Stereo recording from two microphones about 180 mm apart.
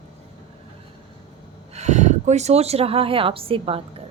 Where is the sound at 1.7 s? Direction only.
40° right (ahead or behind).